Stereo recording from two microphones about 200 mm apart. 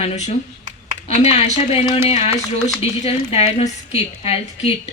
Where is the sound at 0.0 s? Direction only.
30° left (ahead or behind).